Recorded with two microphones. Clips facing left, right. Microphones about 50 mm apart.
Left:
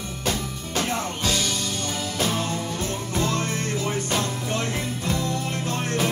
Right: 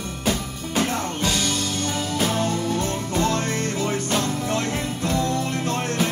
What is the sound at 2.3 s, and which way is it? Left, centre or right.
Music, right.